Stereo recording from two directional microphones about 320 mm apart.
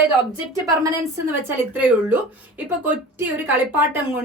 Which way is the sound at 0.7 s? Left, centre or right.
Centre.